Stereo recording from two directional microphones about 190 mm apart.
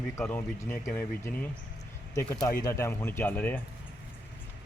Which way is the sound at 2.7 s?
15° left (ahead or behind).